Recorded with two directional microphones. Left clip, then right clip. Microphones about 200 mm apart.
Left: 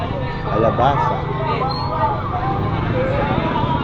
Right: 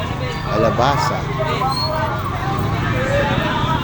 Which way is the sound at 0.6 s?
20° right (ahead or behind).